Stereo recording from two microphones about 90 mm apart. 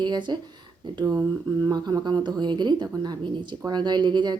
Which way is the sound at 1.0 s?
40° right (ahead or behind).